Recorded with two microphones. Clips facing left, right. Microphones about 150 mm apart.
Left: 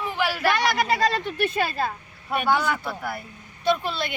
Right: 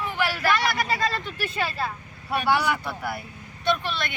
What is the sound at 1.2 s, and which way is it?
Speech, 55° left (ahead or behind).